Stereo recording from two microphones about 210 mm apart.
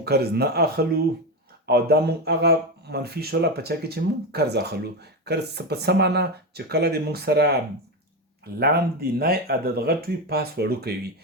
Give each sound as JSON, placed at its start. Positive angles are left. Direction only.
{"t": 0.0, "sound": "speech", "side_deg": -50}